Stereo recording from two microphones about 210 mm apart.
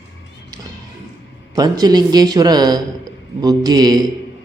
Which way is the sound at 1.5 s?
20° right (ahead or behind).